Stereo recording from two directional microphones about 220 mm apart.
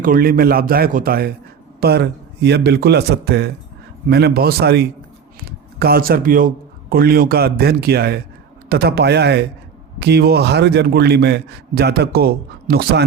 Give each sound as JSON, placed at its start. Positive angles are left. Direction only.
{"t": 0.0, "sound": "a man's voice", "side_deg": -40}